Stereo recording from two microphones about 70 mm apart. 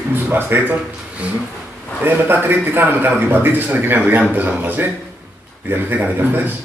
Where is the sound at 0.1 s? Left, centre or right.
Right.